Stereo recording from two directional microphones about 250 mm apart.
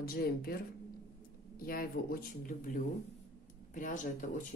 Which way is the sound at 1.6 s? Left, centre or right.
Left.